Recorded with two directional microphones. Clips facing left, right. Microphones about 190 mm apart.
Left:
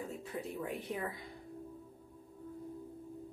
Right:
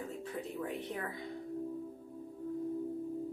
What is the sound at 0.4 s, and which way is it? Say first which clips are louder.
Speech: right 1 dB; 10° left (ahead or behind).